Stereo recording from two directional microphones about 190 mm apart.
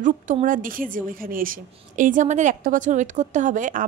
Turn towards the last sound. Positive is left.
turn(degrees=-45)  # may be behind; listen again after turning